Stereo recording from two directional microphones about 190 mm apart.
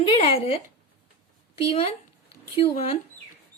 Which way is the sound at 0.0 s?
30° left (ahead or behind).